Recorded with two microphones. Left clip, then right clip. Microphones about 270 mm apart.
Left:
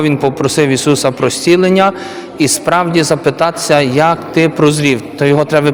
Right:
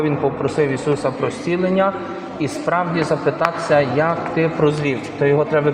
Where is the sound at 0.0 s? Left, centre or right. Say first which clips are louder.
Left 6 dB; left.